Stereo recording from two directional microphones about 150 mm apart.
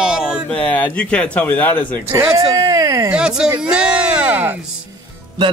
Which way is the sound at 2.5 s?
20° right (ahead or behind).